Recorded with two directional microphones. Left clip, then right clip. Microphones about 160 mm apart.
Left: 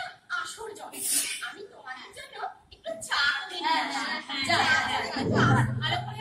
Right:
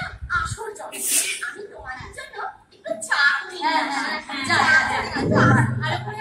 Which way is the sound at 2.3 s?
25° left (ahead or behind).